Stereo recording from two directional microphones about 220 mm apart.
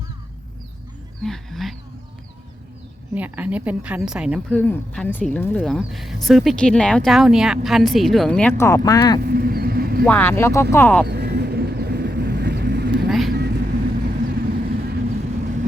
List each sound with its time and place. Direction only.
1.2 s a woman's voice: centre (ahead or behind)
3.2 s a woman's voice: 5° right (ahead or behind); by 9.2 s 15° left (ahead or behind)
9.2 s vehicle: 40° right (ahead or behind)
10.1 s speech: 10° left (ahead or behind)
11.0 s vehicle: 50° right (ahead or behind)
13.1 s vehicle: centre (ahead or behind)
13.3 s vehicle: 45° right (ahead or behind)